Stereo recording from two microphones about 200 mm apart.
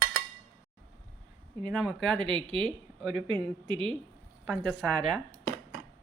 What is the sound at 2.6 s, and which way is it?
Speech, centre (ahead or behind).